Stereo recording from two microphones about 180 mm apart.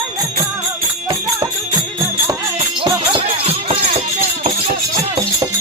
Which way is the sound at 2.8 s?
30° right (ahead or behind).